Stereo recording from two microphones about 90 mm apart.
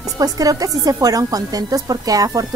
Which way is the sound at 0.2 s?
40° right (ahead or behind).